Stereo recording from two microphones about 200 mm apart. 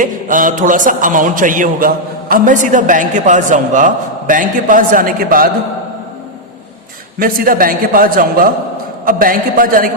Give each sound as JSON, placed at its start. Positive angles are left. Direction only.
{"t": 0.0, "sound": "a man's voice", "side_deg": -40}
{"t": 7.2, "sound": "a man's voice", "side_deg": -45}